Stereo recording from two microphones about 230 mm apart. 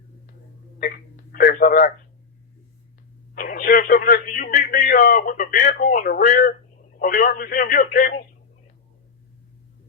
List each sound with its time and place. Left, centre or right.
0.8 s telephone: left
3.3 s speech: left
7.8 s speech: left